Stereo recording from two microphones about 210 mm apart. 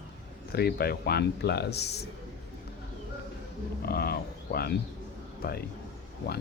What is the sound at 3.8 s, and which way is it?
Speech, 50° left (ahead or behind).